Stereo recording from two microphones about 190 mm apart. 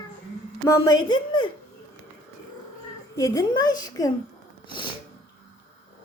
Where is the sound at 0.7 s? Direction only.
15° left (ahead or behind).